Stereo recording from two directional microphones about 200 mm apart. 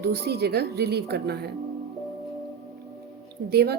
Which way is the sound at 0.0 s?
55° right (ahead or behind).